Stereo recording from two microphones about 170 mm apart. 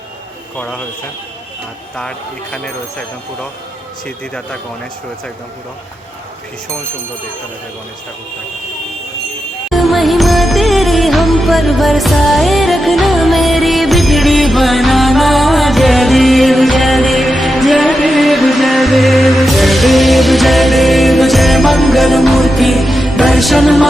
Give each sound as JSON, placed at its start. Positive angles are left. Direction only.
{"t": 2.0, "sound": "speech", "side_deg": 5}
{"t": 9.6, "sound": "music", "side_deg": 0}